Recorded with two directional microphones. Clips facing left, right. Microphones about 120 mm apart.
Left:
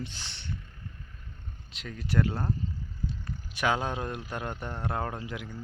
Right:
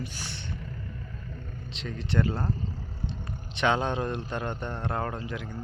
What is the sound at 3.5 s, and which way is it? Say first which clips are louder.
Speech: right 3 dB; 5° left (ahead or behind).